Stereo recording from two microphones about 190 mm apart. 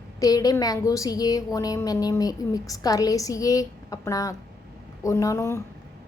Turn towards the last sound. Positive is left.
turn(degrees=15)  # may be behind; listen again after turning